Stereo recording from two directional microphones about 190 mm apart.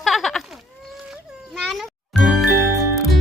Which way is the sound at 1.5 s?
Centre (ahead or behind).